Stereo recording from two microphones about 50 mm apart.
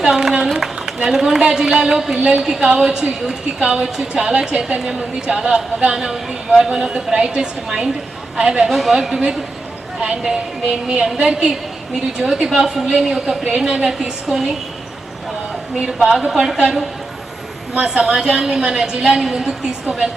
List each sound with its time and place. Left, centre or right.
0.1 s a sound: centre
1.0 s a woman's voice: centre
4.1 s a woman's voice: centre
8.7 s a woman's voice: centre
15.9 s a woman's voice: centre
17.7 s a woman's voice: centre